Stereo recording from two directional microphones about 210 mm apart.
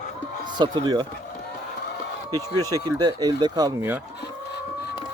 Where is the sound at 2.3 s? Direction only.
15° right (ahead or behind).